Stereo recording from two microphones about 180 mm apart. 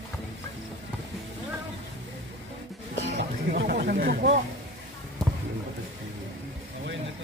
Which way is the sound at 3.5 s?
55° right (ahead or behind).